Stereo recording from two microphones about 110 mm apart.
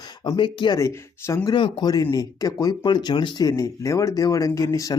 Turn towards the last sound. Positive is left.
turn(degrees=30)  # may be behind; listen again after turning